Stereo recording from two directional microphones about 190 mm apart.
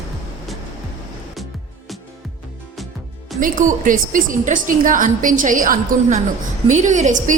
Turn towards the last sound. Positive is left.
turn(degrees=-40)  # may be behind; listen again after turning